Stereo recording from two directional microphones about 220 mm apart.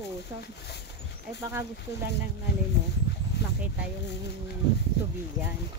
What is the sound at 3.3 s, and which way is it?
Dog, 50° left (ahead or behind).